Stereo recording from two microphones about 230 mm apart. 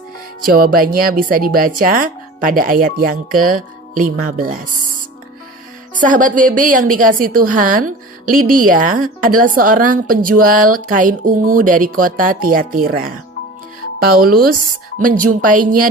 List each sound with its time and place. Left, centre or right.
0.6 s speech: right
5.9 s speech: right
14.4 s speech: right